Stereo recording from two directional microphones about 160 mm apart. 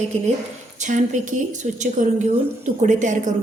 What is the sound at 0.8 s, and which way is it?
A woman's voice, 50° right (ahead or behind).